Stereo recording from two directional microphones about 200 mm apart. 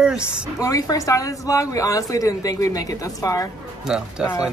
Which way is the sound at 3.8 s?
5° right (ahead or behind).